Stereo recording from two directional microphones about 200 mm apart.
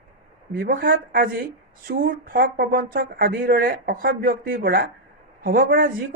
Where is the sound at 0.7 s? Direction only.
45° right (ahead or behind).